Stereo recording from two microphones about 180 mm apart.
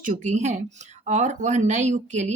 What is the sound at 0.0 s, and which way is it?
A woman's voice, 45° right (ahead or behind).